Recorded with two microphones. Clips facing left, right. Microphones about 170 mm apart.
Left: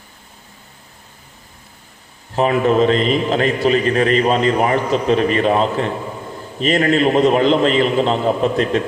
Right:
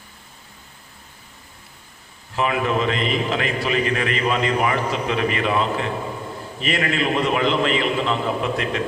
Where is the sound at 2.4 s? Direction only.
35° left (ahead or behind).